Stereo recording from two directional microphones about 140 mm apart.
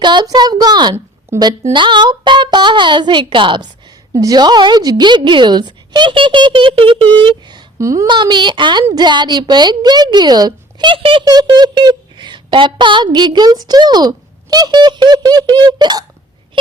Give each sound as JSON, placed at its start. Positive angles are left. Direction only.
{"t": 0.0, "sound": "a woman's voice", "side_deg": -30}
{"t": 1.3, "sound": "a woman's voice", "side_deg": -20}
{"t": 1.7, "sound": "speech", "side_deg": -35}